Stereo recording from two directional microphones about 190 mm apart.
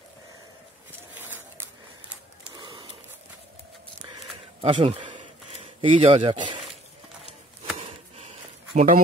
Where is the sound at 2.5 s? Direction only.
25° right (ahead or behind).